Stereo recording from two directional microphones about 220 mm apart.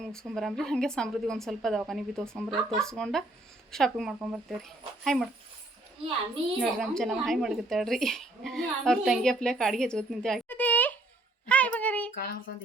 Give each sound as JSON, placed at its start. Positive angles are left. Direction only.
{"t": 0.0, "sound": "speech", "side_deg": 5}
{"t": 6.6, "sound": "speech", "side_deg": 0}
{"t": 11.4, "sound": "a sound", "side_deg": 5}
{"t": 12.1, "sound": "child singing", "side_deg": 40}